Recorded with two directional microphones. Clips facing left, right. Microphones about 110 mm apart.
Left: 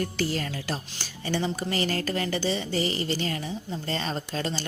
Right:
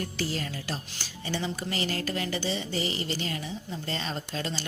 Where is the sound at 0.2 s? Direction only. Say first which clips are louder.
Left 3 dB; 55° left (ahead or behind).